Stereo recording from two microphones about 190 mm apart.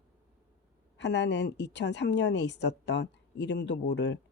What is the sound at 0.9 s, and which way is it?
A woman's voice, 65° left (ahead or behind).